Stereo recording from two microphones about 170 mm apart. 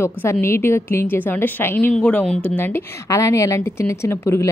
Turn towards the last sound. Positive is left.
turn(degrees=15)  # may be behind; listen again after turning